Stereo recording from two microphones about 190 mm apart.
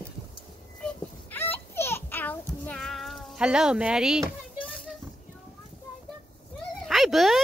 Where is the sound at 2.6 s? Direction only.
5° left (ahead or behind).